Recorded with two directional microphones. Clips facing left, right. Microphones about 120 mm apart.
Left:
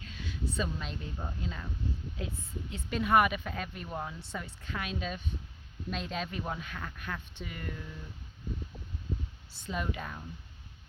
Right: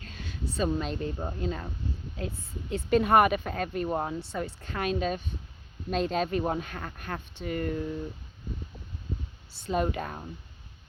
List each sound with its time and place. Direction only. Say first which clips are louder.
0.0 s speech: right 1 dB; 45° right (ahead or behind)
9.6 s speech: right 8 dB; 45° right (ahead or behind)